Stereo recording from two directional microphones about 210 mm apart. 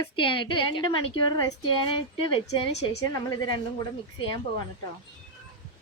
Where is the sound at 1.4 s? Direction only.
15° left (ahead or behind).